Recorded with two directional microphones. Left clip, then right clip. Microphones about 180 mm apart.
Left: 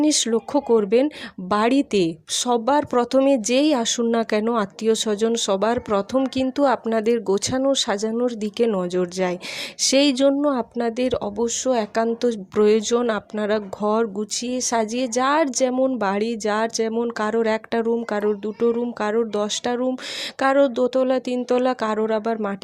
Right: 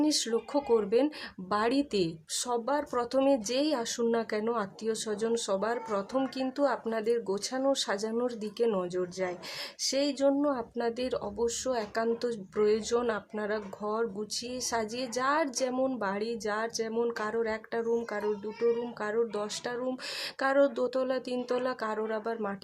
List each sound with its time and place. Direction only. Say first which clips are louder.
0.0 s speech: left 9 dB; 30° left (ahead or behind)